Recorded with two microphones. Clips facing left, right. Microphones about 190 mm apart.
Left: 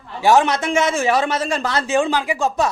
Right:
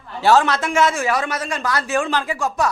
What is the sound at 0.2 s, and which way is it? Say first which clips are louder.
A man's voice: left 1 dB; 15° left (ahead or behind).